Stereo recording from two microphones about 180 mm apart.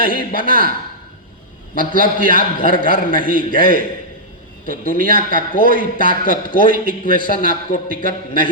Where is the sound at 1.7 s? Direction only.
50° left (ahead or behind).